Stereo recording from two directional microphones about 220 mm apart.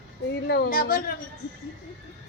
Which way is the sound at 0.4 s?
45° left (ahead or behind).